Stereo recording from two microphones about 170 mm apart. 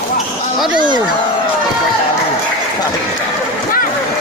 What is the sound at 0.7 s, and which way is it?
Speech, 25° right (ahead or behind).